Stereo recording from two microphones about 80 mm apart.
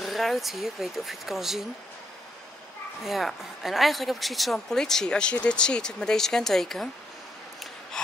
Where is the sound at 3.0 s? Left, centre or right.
Centre.